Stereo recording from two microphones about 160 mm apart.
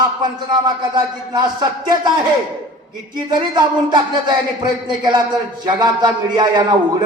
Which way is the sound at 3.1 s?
30° right (ahead or behind).